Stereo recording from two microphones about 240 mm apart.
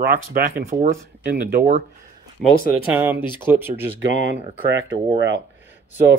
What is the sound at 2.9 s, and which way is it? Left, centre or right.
Speech, centre.